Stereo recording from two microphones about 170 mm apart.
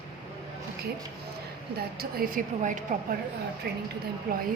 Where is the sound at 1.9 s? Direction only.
60° right (ahead or behind).